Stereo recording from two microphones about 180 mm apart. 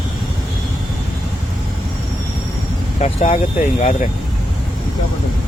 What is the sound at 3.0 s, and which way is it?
Speech, 35° left (ahead or behind).